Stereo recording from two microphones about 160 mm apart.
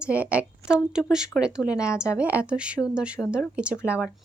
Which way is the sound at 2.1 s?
10° right (ahead or behind).